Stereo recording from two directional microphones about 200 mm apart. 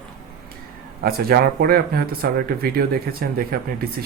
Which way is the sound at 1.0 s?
50° right (ahead or behind).